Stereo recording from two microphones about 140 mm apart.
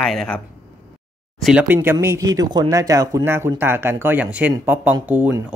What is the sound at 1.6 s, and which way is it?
Speech, 15° right (ahead or behind).